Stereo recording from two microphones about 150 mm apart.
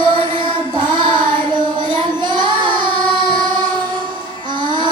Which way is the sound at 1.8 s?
30° right (ahead or behind).